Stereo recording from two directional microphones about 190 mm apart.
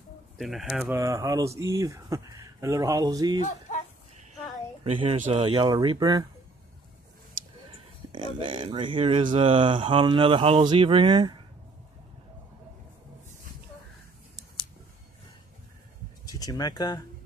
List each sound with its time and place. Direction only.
0.4 s speech: centre (ahead or behind); by 3.3 s 20° right (ahead or behind)
4.8 s speech: 30° right (ahead or behind)
7.7 s speech: 25° right (ahead or behind)
16.3 s speech: 20° left (ahead or behind)